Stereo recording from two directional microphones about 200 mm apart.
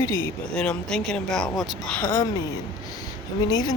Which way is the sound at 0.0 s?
15° left (ahead or behind).